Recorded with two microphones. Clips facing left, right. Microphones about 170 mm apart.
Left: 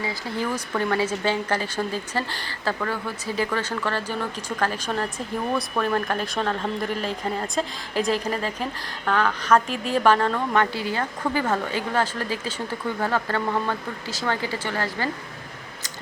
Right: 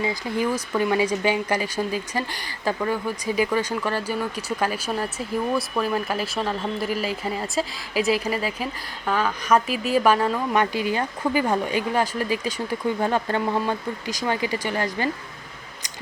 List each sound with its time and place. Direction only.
0.0 s speech: 20° right (ahead or behind)